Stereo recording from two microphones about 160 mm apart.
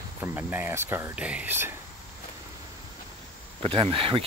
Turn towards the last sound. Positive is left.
turn(degrees=-30)  # may be behind; listen again after turning